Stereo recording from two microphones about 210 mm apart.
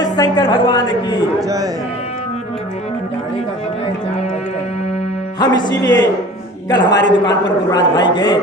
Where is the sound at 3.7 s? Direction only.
30° left (ahead or behind).